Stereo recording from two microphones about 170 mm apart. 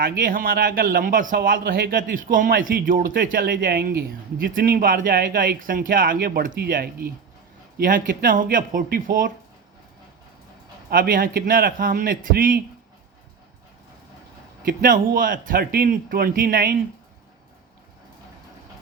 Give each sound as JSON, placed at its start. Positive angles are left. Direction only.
{"t": 0.0, "sound": "speech", "side_deg": -60}
{"t": 10.8, "sound": "speech", "side_deg": -60}
{"t": 14.6, "sound": "speech", "side_deg": -55}